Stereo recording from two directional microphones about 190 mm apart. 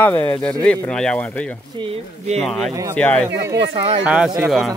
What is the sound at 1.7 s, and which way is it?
Speech, 30° right (ahead or behind).